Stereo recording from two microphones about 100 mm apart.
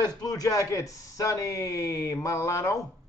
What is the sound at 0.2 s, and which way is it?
Speech, 35° left (ahead or behind).